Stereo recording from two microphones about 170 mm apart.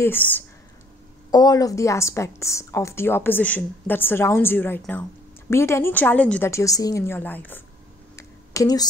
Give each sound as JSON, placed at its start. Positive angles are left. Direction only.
{"t": 0.0, "sound": "a woman's voice", "side_deg": 10}
{"t": 1.3, "sound": "a woman's voice", "side_deg": 20}
{"t": 8.2, "sound": "a sound", "side_deg": 20}